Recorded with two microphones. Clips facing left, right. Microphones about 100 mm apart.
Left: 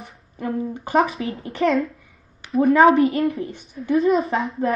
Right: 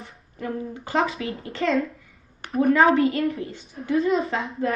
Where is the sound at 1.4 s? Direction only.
30° left (ahead or behind).